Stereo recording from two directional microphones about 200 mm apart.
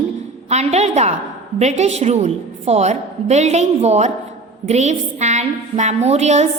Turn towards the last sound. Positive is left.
turn(degrees=-35)  # may be behind; listen again after turning